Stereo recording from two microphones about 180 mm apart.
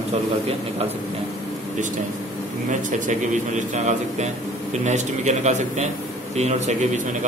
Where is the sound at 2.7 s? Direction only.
45° right (ahead or behind).